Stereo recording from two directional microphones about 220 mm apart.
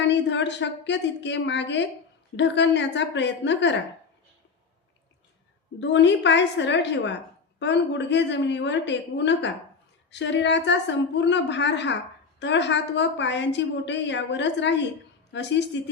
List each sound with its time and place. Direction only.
0.1 s a woman's voice: 55° left (ahead or behind)
5.8 s a woman's voice: 55° left (ahead or behind)